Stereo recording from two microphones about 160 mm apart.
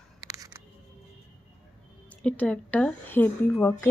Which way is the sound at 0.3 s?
20° right (ahead or behind).